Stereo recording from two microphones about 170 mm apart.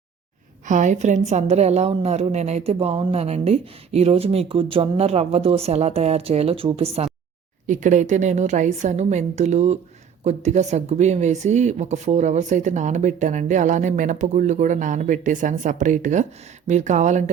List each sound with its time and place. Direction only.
0.6 s a woman's voice: 45° right (ahead or behind)
7.7 s speech: 45° right (ahead or behind)